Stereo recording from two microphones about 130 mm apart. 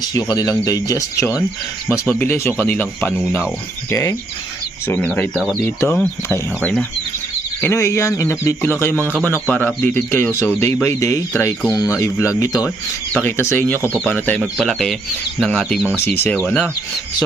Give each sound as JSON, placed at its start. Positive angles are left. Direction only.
{"t": 0.0, "sound": "speech", "side_deg": 30}
{"t": 1.9, "sound": "speech", "side_deg": 15}
{"t": 5.3, "sound": "speech", "side_deg": 0}
{"t": 6.2, "sound": "speech", "side_deg": 15}
{"t": 14.6, "sound": "speech", "side_deg": 5}
{"t": 16.0, "sound": "speech", "side_deg": 15}